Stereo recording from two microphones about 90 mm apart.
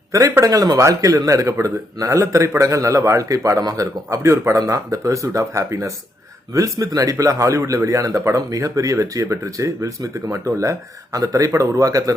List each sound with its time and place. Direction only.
0.1 s a man's voice: 30° right (ahead or behind)
0.5 s a man's voice: 45° right (ahead or behind)